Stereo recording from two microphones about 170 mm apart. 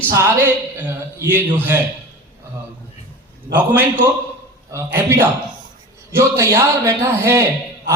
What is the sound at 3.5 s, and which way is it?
A man's voice, 10° right (ahead or behind).